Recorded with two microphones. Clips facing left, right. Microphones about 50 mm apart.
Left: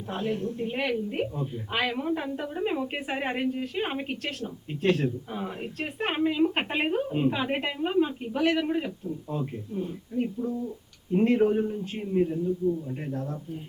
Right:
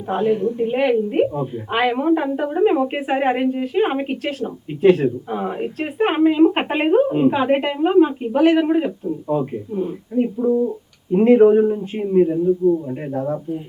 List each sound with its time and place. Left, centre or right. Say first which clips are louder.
0.1 s speech: right 11 dB; centre
3.1 s speech: right 10 dB; centre
4.2 s a woman's voice: right 9 dB; centre
5.0 s speech: right 9 dB; right
10.3 s speech: right 13 dB; right
11.1 s speech: right 11 dB; centre